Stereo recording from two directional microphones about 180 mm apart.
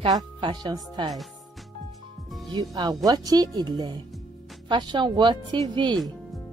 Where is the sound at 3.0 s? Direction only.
20° right (ahead or behind).